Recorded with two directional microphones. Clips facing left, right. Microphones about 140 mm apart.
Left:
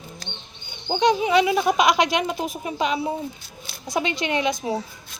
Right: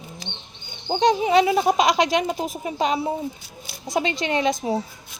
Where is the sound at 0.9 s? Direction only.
35° right (ahead or behind).